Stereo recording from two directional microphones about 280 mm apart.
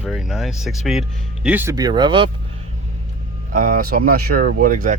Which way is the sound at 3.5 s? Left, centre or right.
Right.